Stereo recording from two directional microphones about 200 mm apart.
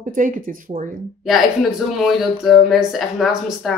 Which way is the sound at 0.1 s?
45° right (ahead or behind).